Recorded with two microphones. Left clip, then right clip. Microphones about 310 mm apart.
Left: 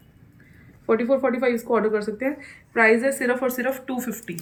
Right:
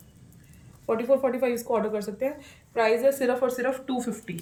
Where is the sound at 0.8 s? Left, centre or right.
Right.